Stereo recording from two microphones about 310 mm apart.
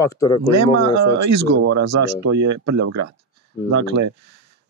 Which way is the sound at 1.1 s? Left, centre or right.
Right.